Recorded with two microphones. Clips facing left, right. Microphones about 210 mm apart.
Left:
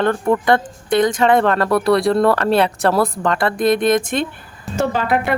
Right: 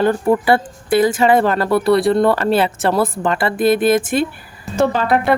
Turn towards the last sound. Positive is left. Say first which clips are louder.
# right 3 dB
turn(degrees=-35)  # may be behind; listen again after turning